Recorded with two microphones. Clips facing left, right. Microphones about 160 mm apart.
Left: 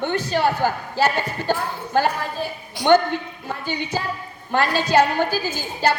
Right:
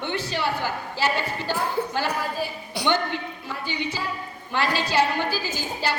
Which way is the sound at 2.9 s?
50° left (ahead or behind).